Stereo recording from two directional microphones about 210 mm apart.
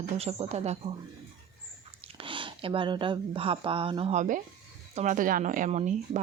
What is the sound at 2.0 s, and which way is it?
Speech, 25° right (ahead or behind).